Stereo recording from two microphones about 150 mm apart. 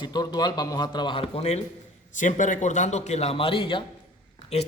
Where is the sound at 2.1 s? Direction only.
55° left (ahead or behind); by 3.8 s 35° left (ahead or behind).